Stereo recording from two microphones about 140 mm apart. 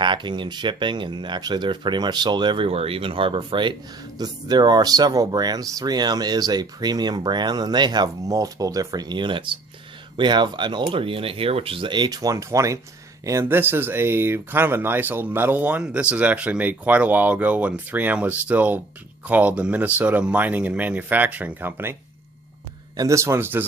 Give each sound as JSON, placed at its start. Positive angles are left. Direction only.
{"t": 0.0, "sound": "speech", "side_deg": -35}
{"t": 23.0, "sound": "speech", "side_deg": -20}